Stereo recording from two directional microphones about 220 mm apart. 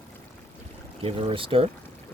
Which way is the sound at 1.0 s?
25° right (ahead or behind).